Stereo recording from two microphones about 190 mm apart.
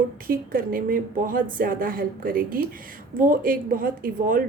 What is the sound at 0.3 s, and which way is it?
Speech, 50° right (ahead or behind).